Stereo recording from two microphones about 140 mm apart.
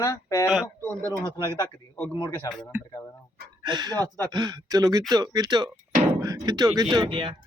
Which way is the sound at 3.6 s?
30° right (ahead or behind).